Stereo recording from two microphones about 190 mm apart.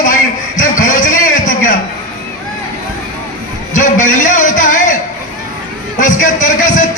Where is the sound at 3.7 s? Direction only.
45° left (ahead or behind).